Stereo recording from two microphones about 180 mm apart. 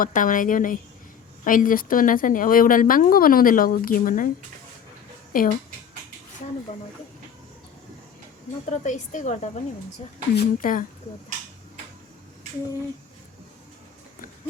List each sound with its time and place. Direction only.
0.0 s speech: 50° left (ahead or behind)
5.3 s speech: 50° left (ahead or behind)
8.7 s a woman's voice: 40° left (ahead or behind)